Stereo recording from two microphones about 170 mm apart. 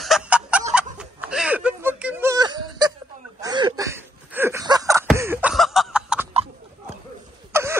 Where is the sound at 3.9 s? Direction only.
15° right (ahead or behind).